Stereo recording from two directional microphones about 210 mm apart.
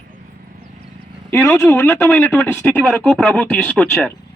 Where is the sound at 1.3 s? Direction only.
15° left (ahead or behind).